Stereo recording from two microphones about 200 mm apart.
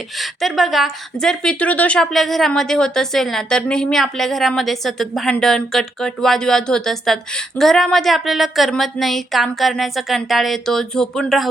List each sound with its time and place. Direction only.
0.2 s a woman's voice: centre (ahead or behind)